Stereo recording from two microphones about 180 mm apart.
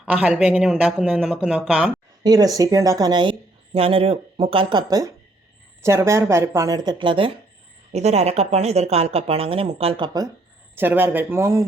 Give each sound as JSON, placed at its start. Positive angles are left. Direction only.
{"t": 0.0, "sound": "speech", "side_deg": -5}
{"t": 2.2, "sound": "speech", "side_deg": -20}
{"t": 10.8, "sound": "speech", "side_deg": -10}